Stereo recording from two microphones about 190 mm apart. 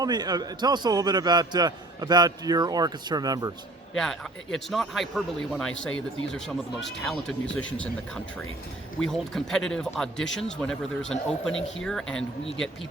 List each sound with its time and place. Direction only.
0.0 s a man's voice: 20° right (ahead or behind)
3.9 s a man's voice: centre (ahead or behind)